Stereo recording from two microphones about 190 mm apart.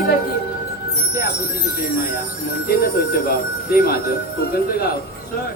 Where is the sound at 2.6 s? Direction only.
50° left (ahead or behind).